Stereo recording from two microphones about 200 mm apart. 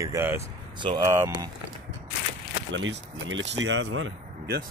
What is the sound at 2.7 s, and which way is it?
Speech, 70° right (ahead or behind).